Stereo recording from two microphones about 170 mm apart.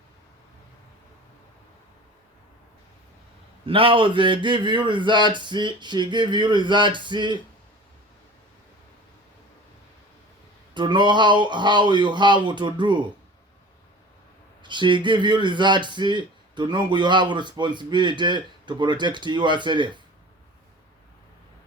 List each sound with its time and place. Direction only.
3.7 s a man's voice: 30° right (ahead or behind)
10.8 s a man's voice: 25° right (ahead or behind)
14.6 s a man's voice: 25° right (ahead or behind)